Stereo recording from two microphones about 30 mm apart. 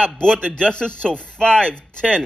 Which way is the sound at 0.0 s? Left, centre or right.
Left.